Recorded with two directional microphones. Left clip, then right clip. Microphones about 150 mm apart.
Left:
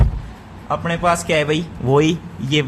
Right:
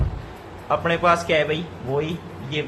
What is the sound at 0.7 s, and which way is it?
Speech, 20° left (ahead or behind).